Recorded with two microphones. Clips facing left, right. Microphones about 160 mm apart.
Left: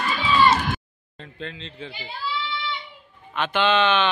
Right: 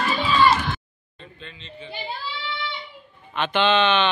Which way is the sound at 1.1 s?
90° left.